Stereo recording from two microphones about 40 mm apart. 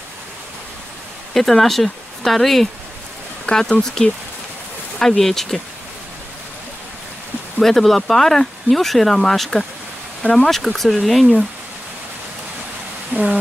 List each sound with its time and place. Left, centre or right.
1.3 s speech: centre
3.4 s speech: centre
7.6 s speech: centre
13.1 s a sound: right